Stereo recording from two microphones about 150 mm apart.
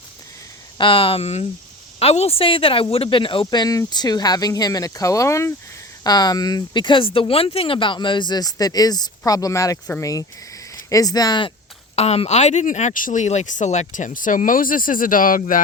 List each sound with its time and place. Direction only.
0.8 s speech: 35° left (ahead or behind)
11.9 s speech: 45° left (ahead or behind); by 15.6 s 65° left (ahead or behind)